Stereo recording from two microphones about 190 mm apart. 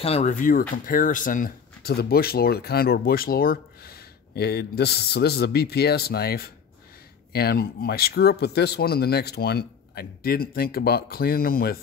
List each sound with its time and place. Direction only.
0.0 s speech: 35° left (ahead or behind); by 11.8 s 50° left (ahead or behind)